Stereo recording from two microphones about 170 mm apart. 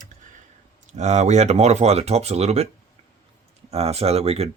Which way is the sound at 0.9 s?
45° right (ahead or behind).